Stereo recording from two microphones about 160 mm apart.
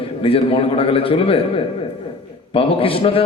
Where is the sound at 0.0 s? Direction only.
35° left (ahead or behind).